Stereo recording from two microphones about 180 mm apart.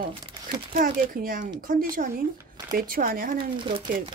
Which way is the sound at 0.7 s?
55° right (ahead or behind).